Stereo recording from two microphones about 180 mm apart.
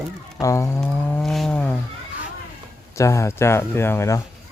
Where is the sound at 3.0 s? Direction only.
15° left (ahead or behind).